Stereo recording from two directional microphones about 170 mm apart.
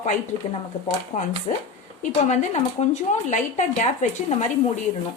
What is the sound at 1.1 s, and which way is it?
Speech, 40° left (ahead or behind).